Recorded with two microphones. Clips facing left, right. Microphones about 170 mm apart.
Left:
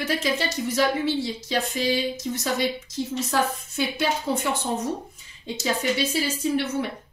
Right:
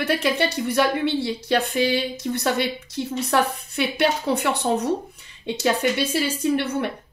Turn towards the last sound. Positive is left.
turn(degrees=-60)  # may be behind; listen again after turning